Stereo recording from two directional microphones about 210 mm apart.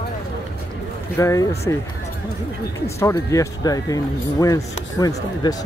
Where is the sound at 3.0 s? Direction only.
15° left (ahead or behind).